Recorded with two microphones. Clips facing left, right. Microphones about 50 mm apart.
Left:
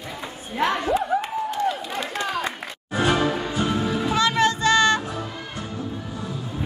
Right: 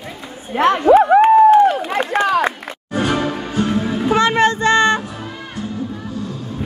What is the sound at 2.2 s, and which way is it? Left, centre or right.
Run, right.